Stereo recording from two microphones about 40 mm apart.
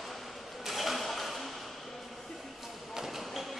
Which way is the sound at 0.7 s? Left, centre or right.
Centre.